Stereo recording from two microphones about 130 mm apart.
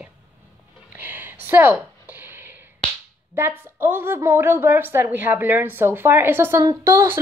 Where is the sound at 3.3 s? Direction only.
15° right (ahead or behind).